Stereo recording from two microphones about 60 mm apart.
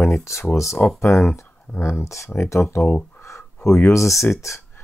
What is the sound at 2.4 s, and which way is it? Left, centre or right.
Speech, left.